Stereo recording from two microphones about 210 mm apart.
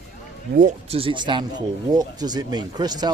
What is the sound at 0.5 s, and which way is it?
Speech, 35° right (ahead or behind).